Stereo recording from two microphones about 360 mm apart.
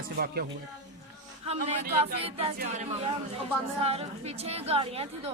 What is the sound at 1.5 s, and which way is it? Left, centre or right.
Speech, right.